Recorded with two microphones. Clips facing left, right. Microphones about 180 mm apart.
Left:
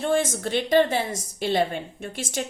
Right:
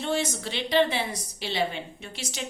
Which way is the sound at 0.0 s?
50° left (ahead or behind).